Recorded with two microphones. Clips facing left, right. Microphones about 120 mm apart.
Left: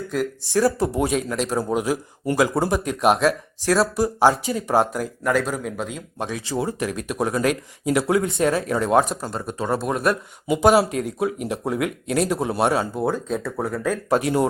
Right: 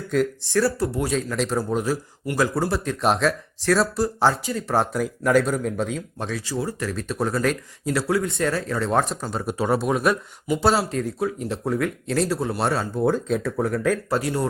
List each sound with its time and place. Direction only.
0.5 s speech: 15° left (ahead or behind)
1.3 s speech: 10° left (ahead or behind)
6.4 s speech: 25° left (ahead or behind); by 9.4 s 5° left (ahead or behind)
9.5 s speech: 5° right (ahead or behind)
10.4 s speech: 15° left (ahead or behind)
14.1 s speech: 20° left (ahead or behind)